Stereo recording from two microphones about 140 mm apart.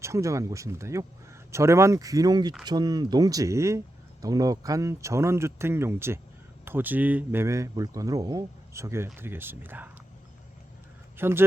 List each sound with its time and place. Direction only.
0.0 s speech: 20° right (ahead or behind)
11.2 s speech: 15° right (ahead or behind)